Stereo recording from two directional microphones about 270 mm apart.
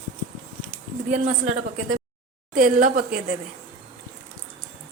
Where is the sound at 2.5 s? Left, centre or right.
Right.